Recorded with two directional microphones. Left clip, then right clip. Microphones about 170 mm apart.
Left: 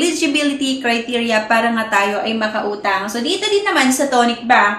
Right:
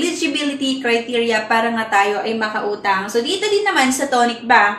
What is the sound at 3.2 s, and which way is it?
Speech, 25° left (ahead or behind).